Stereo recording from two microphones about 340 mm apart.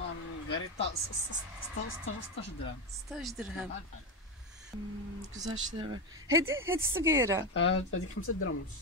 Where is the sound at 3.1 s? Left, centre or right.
Centre.